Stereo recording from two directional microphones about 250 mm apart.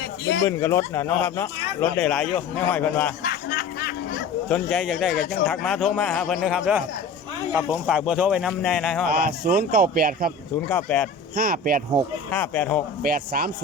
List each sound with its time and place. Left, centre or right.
0.0 s a sound: left
0.4 s a man's voice: centre
3.2 s a sound: left
4.4 s a man's voice: centre
9.0 s a man's voice: right
10.7 s a man's voice: centre
11.3 s a man's voice: right
12.3 s a man's voice: centre
13.0 s a man's voice: right